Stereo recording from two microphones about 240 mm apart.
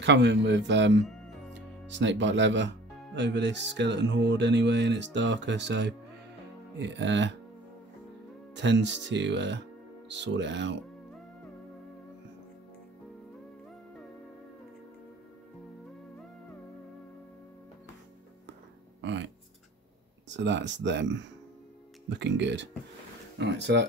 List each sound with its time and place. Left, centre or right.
0.0 s speech: right
8.5 s speech: right
18.9 s music: right
20.2 s speech: right